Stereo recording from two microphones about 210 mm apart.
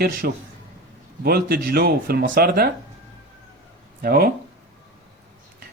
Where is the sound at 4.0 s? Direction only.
45° right (ahead or behind).